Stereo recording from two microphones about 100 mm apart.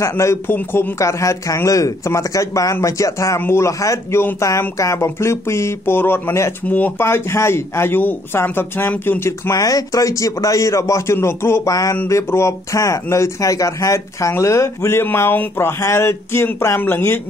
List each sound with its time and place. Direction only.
0.0 s a man's voice: 30° left (ahead or behind)
11.7 s a man's voice: 35° left (ahead or behind)